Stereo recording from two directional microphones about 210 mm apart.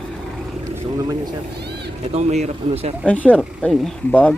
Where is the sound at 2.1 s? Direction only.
30° right (ahead or behind).